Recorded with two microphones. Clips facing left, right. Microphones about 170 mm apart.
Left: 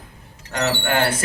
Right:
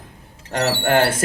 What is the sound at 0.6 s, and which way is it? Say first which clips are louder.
Speech: right 3 dB; 35° right (ahead or behind).